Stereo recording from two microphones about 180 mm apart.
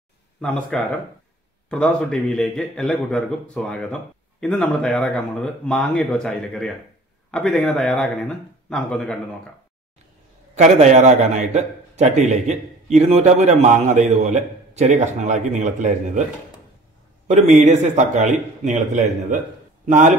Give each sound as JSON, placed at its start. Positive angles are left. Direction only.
{"t": 0.4, "sound": "a man's voice", "side_deg": 5}
{"t": 10.5, "sound": "a man's voice", "side_deg": -40}
{"t": 17.3, "sound": "a man's voice", "side_deg": -40}